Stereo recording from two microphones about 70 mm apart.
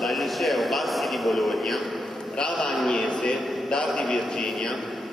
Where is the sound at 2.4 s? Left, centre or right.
Centre.